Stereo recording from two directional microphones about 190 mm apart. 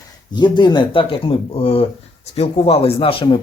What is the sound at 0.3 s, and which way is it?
Speech, 25° left (ahead or behind).